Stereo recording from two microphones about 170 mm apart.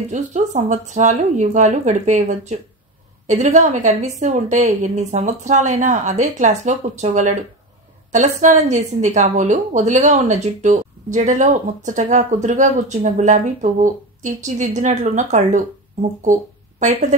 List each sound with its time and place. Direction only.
0.1 s a woman's voice: 45° right (ahead or behind)